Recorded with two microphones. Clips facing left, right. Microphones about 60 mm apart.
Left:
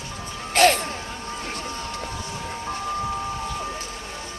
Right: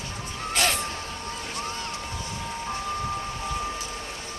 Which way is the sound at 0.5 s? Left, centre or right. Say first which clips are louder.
Left 9 dB; left.